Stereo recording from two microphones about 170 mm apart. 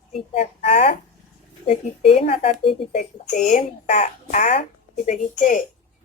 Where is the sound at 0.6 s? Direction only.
35° left (ahead or behind).